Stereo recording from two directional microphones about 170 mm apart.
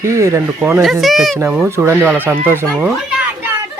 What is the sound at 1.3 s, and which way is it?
Speech, 10° right (ahead or behind).